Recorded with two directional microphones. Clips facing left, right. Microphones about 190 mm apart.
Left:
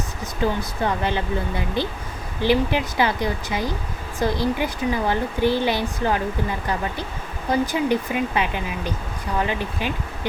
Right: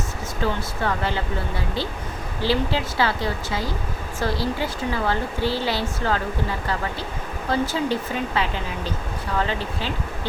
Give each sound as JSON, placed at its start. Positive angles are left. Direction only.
{"t": 0.4, "sound": "speech", "side_deg": 20}
{"t": 7.5, "sound": "speech", "side_deg": 15}